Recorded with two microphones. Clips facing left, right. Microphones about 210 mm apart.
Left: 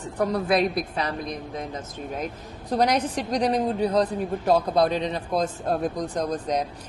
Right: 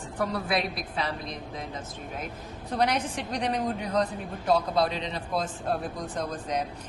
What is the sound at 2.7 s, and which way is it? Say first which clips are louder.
Speech: left 4 dB; 40° left (ahead or behind).